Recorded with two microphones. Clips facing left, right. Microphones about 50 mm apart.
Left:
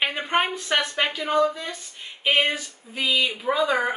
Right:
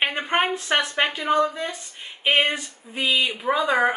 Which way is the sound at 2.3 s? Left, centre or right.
Centre.